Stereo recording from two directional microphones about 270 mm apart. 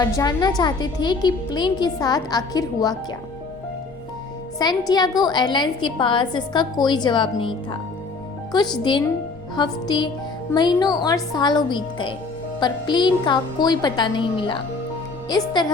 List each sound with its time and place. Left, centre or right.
0.0 s a woman's voice: centre
4.5 s a woman's voice: centre
8.8 s a woman's voice: centre